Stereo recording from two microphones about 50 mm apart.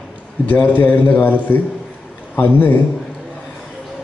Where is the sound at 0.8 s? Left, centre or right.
Left.